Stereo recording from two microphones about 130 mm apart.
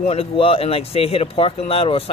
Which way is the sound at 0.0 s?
50° left (ahead or behind).